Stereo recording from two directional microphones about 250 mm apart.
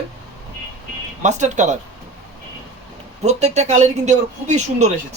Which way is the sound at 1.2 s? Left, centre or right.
Right.